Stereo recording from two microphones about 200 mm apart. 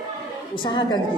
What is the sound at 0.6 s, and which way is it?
Speech, 25° left (ahead or behind).